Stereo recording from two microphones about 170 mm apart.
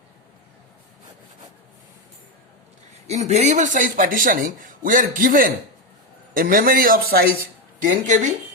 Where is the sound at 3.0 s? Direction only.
40° right (ahead or behind); by 7.2 s 60° right (ahead or behind).